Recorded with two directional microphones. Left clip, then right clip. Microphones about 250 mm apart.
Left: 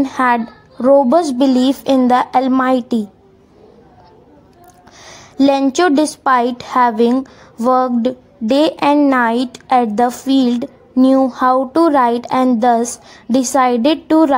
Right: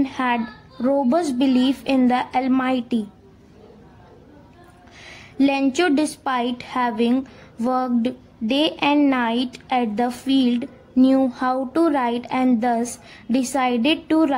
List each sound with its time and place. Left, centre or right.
0.0 s a woman's voice: left
5.0 s a woman's voice: centre